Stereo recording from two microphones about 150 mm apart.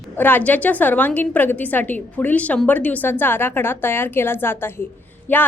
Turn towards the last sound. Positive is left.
turn(degrees=10)  # may be behind; listen again after turning